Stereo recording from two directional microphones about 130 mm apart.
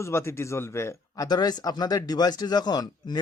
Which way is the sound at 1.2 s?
30° left (ahead or behind).